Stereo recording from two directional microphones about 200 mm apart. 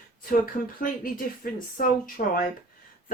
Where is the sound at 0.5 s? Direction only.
40° left (ahead or behind).